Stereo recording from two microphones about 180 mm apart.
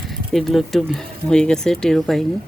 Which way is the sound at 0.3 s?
Centre (ahead or behind).